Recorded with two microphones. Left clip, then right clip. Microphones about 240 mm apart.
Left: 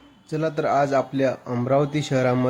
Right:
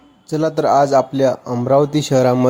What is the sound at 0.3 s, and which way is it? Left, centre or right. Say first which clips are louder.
Speech: right 7 dB; centre.